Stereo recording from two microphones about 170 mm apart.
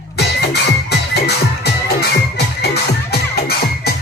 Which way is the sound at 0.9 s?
75° left (ahead or behind).